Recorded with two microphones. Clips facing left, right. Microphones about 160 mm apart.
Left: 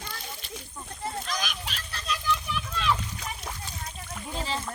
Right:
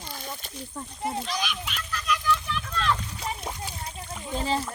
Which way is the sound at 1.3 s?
45° left (ahead or behind).